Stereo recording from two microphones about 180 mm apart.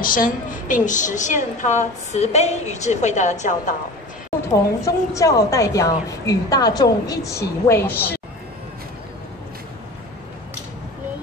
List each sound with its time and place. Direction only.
0.0 s a woman's voice: 50° left (ahead or behind)
4.8 s a woman's voice: 20° left (ahead or behind)